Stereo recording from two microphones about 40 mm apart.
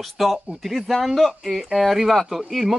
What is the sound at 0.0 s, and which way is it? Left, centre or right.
Speech, centre.